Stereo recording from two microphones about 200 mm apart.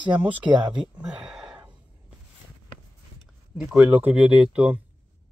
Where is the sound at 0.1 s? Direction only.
5° right (ahead or behind).